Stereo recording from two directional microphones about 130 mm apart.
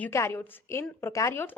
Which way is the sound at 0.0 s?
20° left (ahead or behind).